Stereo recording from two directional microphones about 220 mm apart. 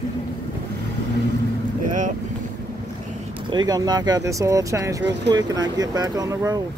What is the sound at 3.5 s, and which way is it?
Speech, 20° right (ahead or behind).